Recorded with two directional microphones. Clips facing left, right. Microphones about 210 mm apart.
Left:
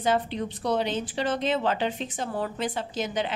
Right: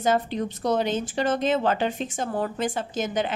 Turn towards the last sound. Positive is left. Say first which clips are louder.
# right 2 dB
turn(degrees=-45)  # may be behind; listen again after turning